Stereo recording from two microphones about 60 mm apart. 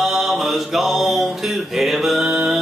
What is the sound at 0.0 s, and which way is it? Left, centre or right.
Mantra, centre.